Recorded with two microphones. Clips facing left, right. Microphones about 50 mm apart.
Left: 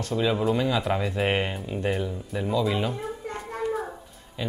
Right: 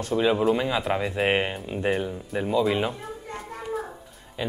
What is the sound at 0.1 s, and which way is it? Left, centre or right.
Speech, centre.